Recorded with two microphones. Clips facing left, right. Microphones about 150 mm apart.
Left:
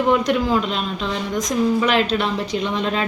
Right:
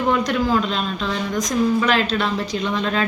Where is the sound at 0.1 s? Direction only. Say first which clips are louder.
Even; 15° left (ahead or behind).